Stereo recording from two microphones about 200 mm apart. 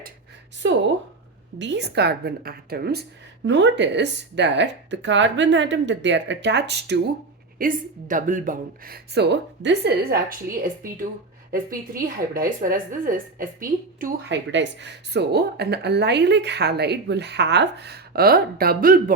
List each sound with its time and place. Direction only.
1.5 s a woman's voice: 60° right (ahead or behind)
7.6 s a woman's voice: 40° right (ahead or behind)
14.3 s a woman's voice: 65° right (ahead or behind); by 19.1 s 45° right (ahead or behind)